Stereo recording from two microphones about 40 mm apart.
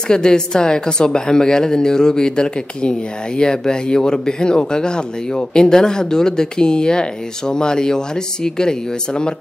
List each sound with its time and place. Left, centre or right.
0.1 s speech: centre